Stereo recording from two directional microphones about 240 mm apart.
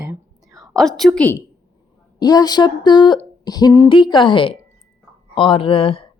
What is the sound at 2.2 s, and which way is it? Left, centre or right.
Speech, centre.